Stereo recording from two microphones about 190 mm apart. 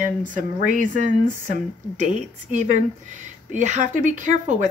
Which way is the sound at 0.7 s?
45° right (ahead or behind).